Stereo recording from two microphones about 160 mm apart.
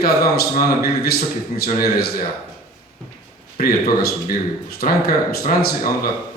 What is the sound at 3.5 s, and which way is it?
Speech, 70° left (ahead or behind).